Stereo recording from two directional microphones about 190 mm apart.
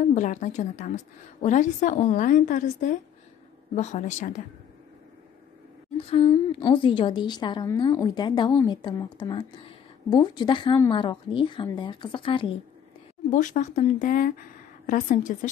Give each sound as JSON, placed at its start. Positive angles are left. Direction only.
{"t": 0.0, "sound": "a woman's voice", "side_deg": 40}
{"t": 6.0, "sound": "a woman's voice", "side_deg": 30}
{"t": 13.3, "sound": "speech", "side_deg": 40}